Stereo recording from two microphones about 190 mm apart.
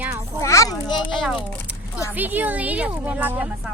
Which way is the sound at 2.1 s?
10° right (ahead or behind).